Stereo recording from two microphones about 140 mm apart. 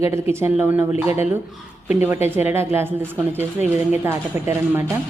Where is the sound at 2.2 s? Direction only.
15° right (ahead or behind).